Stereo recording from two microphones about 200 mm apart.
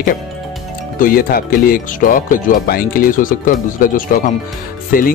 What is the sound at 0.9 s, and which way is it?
Speech, 45° left (ahead or behind).